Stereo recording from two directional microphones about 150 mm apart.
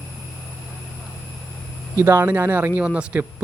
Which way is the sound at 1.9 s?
15° right (ahead or behind).